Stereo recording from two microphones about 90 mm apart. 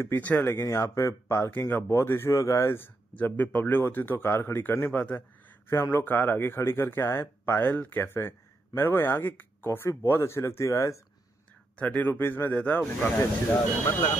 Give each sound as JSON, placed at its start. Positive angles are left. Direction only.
{"t": 0.0, "sound": "speech", "side_deg": 20}
{"t": 0.6, "sound": "speech", "side_deg": 30}
{"t": 11.8, "sound": "a man's voice", "side_deg": 20}